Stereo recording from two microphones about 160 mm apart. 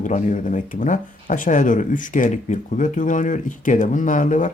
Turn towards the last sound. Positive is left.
turn(degrees=50)  # may be behind; listen again after turning